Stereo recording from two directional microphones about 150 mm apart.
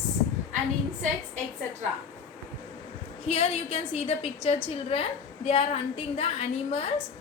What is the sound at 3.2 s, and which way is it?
A woman's voice, 40° left (ahead or behind).